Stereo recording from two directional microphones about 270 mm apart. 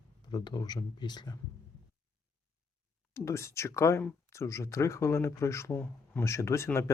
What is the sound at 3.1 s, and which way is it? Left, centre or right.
Speech, centre.